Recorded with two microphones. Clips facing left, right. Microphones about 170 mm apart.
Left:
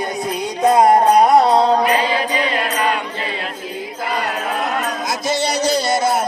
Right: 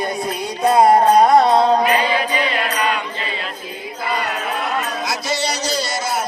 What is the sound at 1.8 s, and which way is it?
Mantra, 30° left (ahead or behind).